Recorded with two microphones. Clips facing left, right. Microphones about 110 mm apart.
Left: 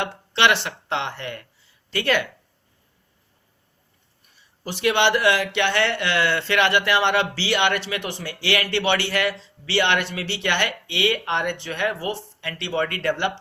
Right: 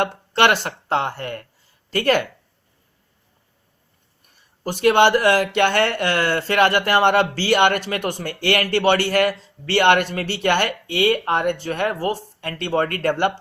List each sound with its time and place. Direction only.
0.0 s speech: 50° right (ahead or behind)
4.4 s speech: 45° right (ahead or behind)